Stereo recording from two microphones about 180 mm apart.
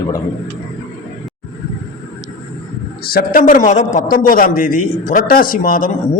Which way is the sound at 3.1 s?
55° left (ahead or behind).